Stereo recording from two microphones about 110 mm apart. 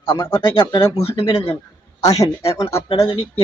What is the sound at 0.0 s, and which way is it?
Speech, 55° left (ahead or behind).